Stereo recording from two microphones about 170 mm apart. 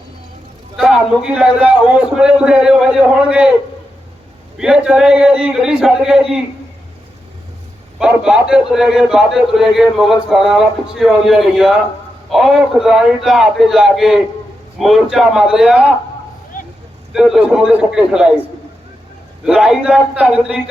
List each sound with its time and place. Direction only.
0.8 s a man's voice: 5° right (ahead or behind)
4.5 s a man's voice: 5° right (ahead or behind)
7.9 s a man's voice: 5° right (ahead or behind)
16.5 s vehicle: 55° left (ahead or behind)
17.1 s a man's voice: 5° right (ahead or behind)
19.5 s a man's voice: 5° right (ahead or behind)